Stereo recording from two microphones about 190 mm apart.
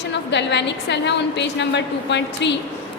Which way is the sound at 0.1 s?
65° left (ahead or behind).